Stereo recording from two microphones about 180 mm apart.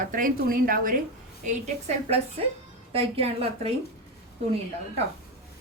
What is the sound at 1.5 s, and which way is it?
A woman's voice, 40° right (ahead or behind).